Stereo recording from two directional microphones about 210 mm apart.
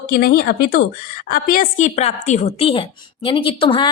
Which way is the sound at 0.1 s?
45° left (ahead or behind).